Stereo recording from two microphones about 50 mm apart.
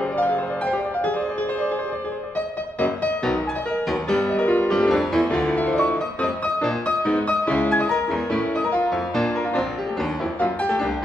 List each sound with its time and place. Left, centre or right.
3.9 s music: centre
4.4 s music: left
4.6 s music: centre
5.6 s music: left
7.9 s music: centre
8.5 s music: left
8.8 s music: centre